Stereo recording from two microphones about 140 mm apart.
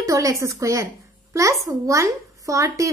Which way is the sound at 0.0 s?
25° right (ahead or behind).